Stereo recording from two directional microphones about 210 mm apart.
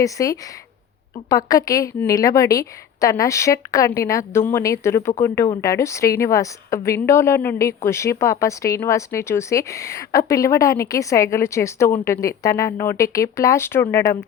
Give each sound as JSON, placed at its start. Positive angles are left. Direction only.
{"t": 0.0, "sound": "a woman's voice", "side_deg": 15}